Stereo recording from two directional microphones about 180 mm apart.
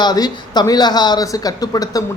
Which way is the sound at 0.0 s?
20° left (ahead or behind).